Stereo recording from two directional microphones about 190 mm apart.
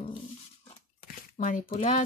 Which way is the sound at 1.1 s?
45° left (ahead or behind).